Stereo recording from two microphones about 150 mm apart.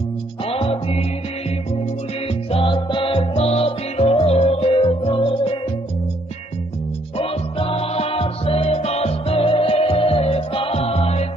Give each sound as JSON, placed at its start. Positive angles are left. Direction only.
{"t": 0.5, "sound": "music", "side_deg": 40}
{"t": 2.5, "sound": "music", "side_deg": 35}
{"t": 7.2, "sound": "music", "side_deg": 40}